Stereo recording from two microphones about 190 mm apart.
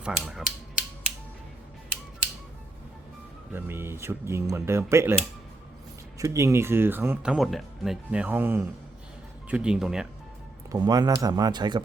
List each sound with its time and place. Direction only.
0.0 s a sound: 5° right (ahead or behind)
3.5 s speech: 10° right (ahead or behind)
6.1 s speech: 15° right (ahead or behind)
10.7 s speech: 20° right (ahead or behind)